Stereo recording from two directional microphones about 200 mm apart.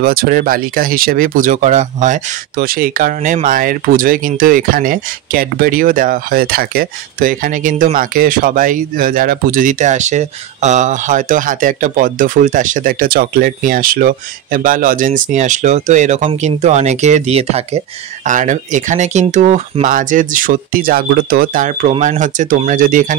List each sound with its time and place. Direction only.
0.0 s speech: 45° right (ahead or behind)